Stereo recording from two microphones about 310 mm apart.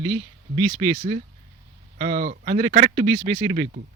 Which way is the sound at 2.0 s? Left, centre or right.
Right.